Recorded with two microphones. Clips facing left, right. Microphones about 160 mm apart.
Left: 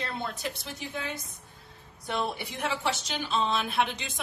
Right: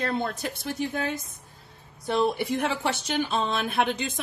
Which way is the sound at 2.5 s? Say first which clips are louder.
Right 4 dB; 55° right (ahead or behind).